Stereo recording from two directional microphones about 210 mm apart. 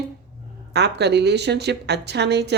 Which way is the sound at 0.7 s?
55° right (ahead or behind).